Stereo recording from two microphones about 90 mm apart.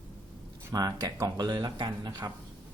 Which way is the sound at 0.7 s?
45° right (ahead or behind).